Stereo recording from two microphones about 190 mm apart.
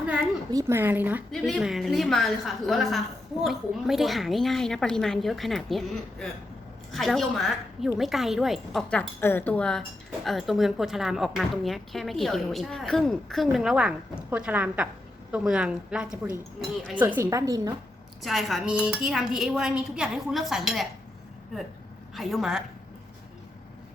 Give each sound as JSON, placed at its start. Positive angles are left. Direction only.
{"t": 0.5, "sound": "speech", "side_deg": -15}
{"t": 1.3, "sound": "a woman's voice", "side_deg": 0}
{"t": 18.2, "sound": "a woman's voice", "side_deg": 0}
{"t": 22.1, "sound": "a woman's voice", "side_deg": 0}